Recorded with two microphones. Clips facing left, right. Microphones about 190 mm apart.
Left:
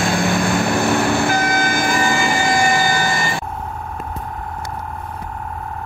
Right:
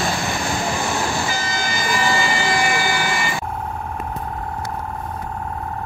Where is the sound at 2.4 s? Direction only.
45° left (ahead or behind).